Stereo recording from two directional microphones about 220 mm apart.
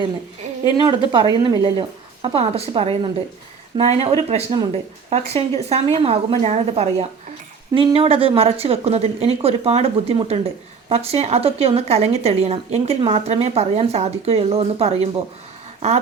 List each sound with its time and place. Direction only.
0.9 s a woman's voice: 20° right (ahead or behind)